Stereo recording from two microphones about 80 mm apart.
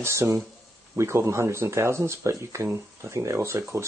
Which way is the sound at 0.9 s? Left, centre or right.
Right.